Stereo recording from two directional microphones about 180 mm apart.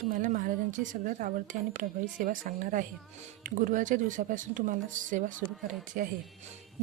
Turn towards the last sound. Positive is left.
turn(degrees=-50)  # may be behind; listen again after turning